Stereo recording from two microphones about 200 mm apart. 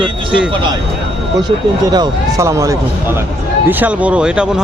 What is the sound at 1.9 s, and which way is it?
Speech, 15° right (ahead or behind).